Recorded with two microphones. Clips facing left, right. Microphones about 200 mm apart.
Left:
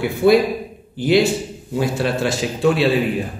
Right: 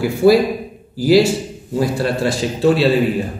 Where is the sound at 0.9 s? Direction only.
5° right (ahead or behind).